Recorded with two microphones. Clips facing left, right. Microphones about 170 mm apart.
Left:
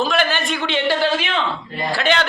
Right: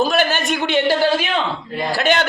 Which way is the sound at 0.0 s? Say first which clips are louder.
Right 2 dB; 40° right (ahead or behind).